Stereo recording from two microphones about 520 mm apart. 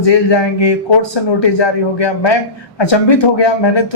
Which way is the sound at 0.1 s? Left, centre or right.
Left.